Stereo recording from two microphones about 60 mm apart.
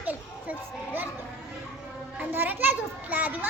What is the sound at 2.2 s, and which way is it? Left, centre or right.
A child's voice, right.